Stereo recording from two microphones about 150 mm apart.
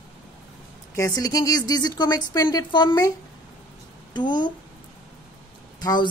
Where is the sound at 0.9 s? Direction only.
25° left (ahead or behind).